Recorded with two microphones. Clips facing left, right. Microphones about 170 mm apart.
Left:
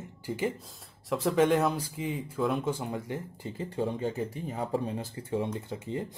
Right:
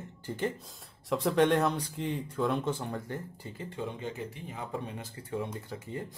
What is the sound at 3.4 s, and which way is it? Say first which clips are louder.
A man's voice: left 6 dB; 30° left (ahead or behind).